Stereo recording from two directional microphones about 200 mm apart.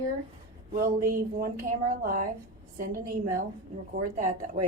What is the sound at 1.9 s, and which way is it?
A woman's voice, 45° right (ahead or behind).